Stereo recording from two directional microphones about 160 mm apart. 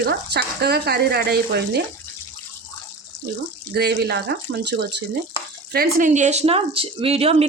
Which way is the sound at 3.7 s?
90° right.